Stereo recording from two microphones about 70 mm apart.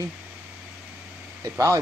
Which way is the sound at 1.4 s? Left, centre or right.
Right.